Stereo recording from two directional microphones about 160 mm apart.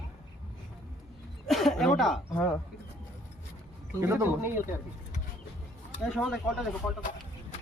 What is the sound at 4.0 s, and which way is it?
Speech, 15° right (ahead or behind).